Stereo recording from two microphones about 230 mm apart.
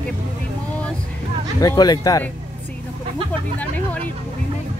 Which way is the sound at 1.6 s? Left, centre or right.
Centre.